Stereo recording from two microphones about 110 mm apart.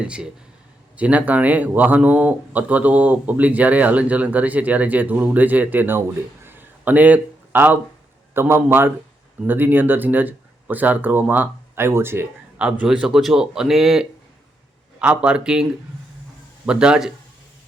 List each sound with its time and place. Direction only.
0.0 s a man's voice: 10° right (ahead or behind)
6.4 s a sound: 20° right (ahead or behind)
8.3 s a man's voice: 20° right (ahead or behind)
12.5 s a man's voice: 10° right (ahead or behind)
16.6 s a man's voice: 10° right (ahead or behind)